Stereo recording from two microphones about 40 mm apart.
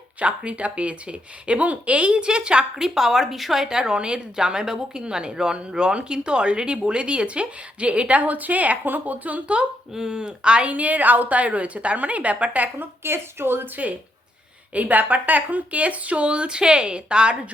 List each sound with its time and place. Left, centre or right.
0.2 s speech: right
2.8 s speech: centre
3.7 s a woman's voice: centre; by 9.6 s right
9.9 s speech: centre
10.7 s a woman's voice: right
12.8 s a woman's voice: right
14.7 s a woman's voice: right